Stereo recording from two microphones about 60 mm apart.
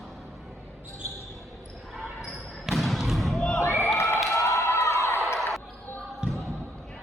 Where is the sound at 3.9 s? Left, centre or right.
Left.